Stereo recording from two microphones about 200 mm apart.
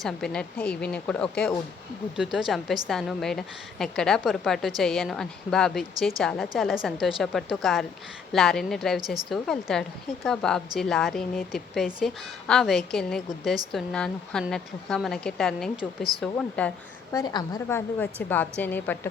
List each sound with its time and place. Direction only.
0.0 s a woman's voice: 5° left (ahead or behind)